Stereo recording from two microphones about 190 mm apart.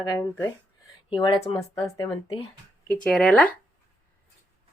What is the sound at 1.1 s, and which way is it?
Speech, 25° left (ahead or behind).